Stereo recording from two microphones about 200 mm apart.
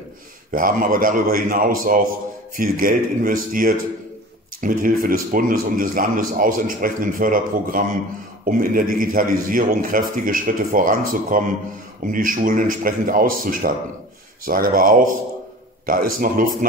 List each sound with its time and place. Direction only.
0.5 s speech: 45° right (ahead or behind)